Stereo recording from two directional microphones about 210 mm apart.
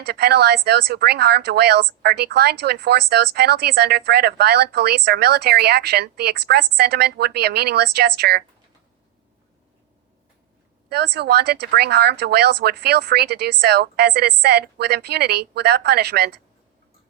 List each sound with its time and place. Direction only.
0.0 s a woman's voice: 50° right (ahead or behind)
10.8 s a woman's voice: 50° right (ahead or behind)